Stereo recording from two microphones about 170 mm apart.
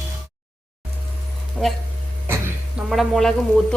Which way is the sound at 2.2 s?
15° right (ahead or behind).